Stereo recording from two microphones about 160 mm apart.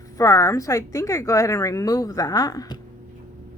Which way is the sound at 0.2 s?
20° left (ahead or behind).